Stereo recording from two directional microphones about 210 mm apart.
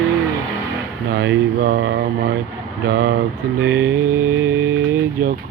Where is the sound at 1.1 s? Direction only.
55° right (ahead or behind).